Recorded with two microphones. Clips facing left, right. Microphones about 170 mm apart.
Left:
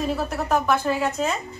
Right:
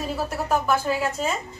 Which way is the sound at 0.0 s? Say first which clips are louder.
Left 2 dB; 5° right (ahead or behind).